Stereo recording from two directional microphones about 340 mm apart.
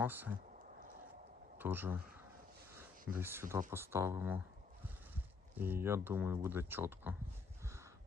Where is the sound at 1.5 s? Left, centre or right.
Centre.